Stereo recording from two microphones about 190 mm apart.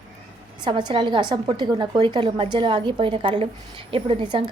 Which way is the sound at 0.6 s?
25° right (ahead or behind).